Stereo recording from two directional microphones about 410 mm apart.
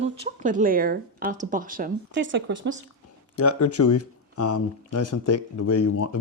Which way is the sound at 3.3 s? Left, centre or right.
Left.